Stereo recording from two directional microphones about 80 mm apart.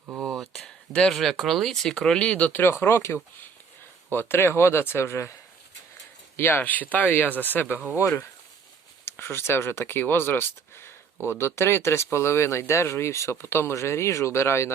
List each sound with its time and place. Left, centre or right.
0.2 s speech: centre; by 5.3 s left
6.3 s speech: left